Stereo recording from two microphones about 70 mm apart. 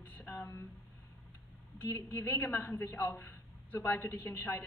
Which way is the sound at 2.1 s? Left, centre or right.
Left.